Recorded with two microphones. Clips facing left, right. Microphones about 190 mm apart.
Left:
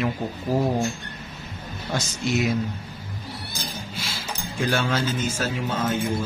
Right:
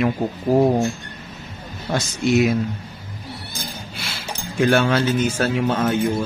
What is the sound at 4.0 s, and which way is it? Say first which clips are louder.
Speech: right 2 dB; 65° right (ahead or behind).